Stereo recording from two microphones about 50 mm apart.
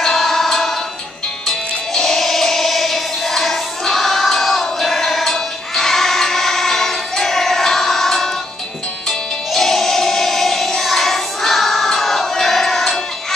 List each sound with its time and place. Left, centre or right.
0.0 s music: centre
2.0 s music: centre
9.5 s music: centre